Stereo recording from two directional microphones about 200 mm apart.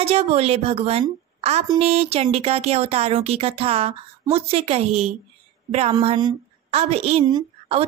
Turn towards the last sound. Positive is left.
turn(degrees=-25)  # may be behind; listen again after turning